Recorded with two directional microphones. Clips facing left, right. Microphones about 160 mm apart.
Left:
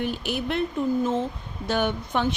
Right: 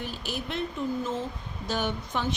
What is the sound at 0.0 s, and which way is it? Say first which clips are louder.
Speech: left 7 dB; 60° left (ahead or behind).